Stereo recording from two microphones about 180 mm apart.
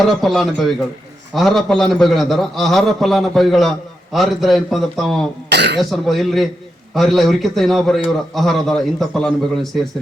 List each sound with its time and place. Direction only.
0.0 s a man's voice: centre (ahead or behind)
5.5 s throat clearing: 70° right (ahead or behind)
5.9 s a man's voice: centre (ahead or behind)